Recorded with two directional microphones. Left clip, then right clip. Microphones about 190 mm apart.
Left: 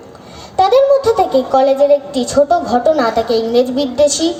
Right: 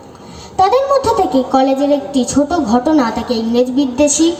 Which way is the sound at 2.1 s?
30° left (ahead or behind).